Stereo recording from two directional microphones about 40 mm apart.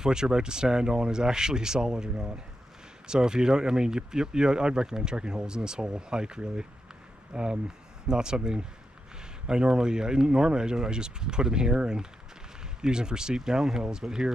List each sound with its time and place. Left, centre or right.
0.0 s speech: centre